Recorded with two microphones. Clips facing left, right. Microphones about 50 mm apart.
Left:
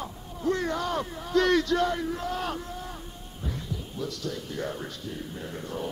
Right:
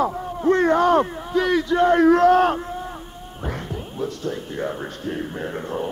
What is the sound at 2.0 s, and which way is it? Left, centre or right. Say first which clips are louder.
Speech: right 17 dB; right.